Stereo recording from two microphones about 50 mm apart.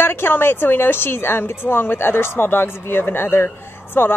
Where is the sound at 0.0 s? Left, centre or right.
Left.